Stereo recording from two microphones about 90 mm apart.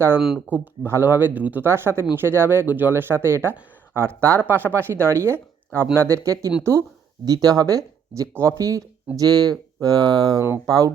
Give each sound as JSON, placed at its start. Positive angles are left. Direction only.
{"t": 0.2, "sound": "speech", "side_deg": -5}
{"t": 0.5, "sound": "speech", "side_deg": -20}
{"t": 7.3, "sound": "speech", "side_deg": -40}